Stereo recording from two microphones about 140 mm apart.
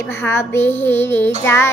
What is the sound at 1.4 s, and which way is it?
Child singing, 20° left (ahead or behind).